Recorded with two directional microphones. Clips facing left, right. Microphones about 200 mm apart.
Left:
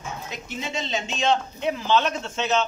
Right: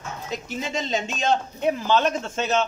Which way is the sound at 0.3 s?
40° right (ahead or behind).